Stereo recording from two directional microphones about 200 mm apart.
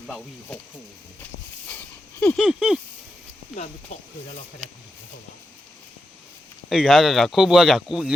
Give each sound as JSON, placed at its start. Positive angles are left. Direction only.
{"t": 1.2, "sound": "a sound", "side_deg": 10}
{"t": 2.2, "sound": "speech", "side_deg": 0}
{"t": 3.5, "sound": "speech", "side_deg": 35}
{"t": 6.7, "sound": "speech", "side_deg": 0}